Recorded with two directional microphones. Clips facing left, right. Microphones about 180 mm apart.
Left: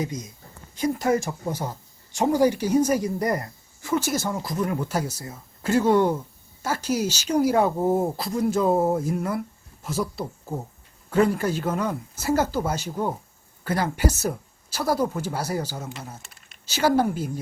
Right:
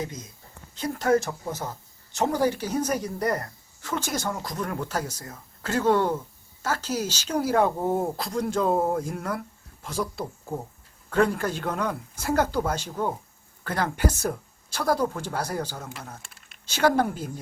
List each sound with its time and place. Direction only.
0.0 s speech: 15° left (ahead or behind)